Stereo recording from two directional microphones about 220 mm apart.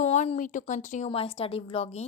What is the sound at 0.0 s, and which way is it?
Speech, 30° left (ahead or behind).